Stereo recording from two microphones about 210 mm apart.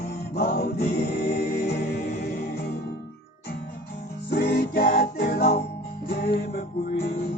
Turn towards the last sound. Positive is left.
turn(degrees=50)  # may be behind; listen again after turning